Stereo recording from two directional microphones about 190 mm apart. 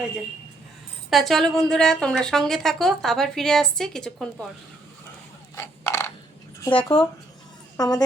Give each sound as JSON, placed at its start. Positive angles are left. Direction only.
{"t": 1.1, "sound": "a woman's voice", "side_deg": 0}
{"t": 5.5, "sound": "a sound", "side_deg": 15}
{"t": 6.6, "sound": "a woman's voice", "side_deg": 20}